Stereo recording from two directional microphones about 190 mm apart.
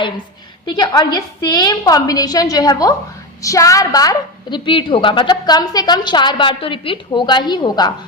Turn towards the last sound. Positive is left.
turn(degrees=20)  # may be behind; listen again after turning